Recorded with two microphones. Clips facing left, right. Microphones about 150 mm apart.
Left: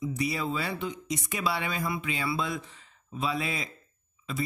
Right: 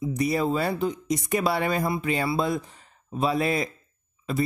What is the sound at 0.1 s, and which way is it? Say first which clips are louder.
Speech: right 11 dB; 45° right (ahead or behind).